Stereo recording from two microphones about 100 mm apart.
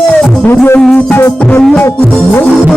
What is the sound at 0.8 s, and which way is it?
Music, 5° left (ahead or behind).